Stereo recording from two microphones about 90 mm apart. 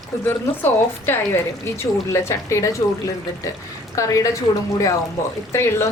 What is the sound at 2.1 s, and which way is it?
Speech, 30° left (ahead or behind).